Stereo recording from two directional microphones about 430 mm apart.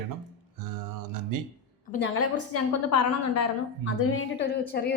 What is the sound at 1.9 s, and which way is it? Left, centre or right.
A woman's voice, left.